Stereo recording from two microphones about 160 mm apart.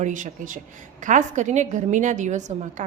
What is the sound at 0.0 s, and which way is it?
A woman's voice, 50° right (ahead or behind).